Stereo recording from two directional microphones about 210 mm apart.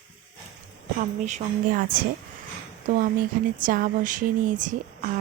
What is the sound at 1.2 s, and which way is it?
Speech, 40° right (ahead or behind).